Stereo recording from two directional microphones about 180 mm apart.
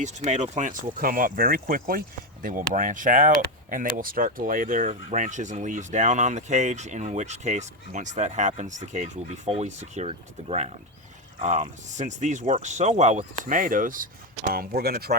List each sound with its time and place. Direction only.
0.0 s speech: 40° right (ahead or behind); by 15.1 s 60° right (ahead or behind)